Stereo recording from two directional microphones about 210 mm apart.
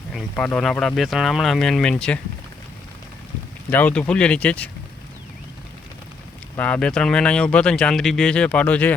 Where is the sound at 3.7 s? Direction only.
5° left (ahead or behind).